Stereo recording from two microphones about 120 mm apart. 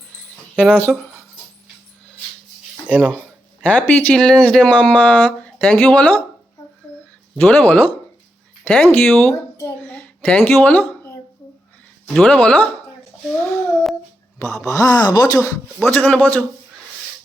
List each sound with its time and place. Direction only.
0.5 s speech: 15° left (ahead or behind)
2.8 s speech: 15° right (ahead or behind)
3.6 s speech: 10° left (ahead or behind)
7.3 s a child's voice: 15° left (ahead or behind)
12.0 s speech: 5° left (ahead or behind)
14.3 s speech: 25° left (ahead or behind)
15.9 s speech: 15° left (ahead or behind)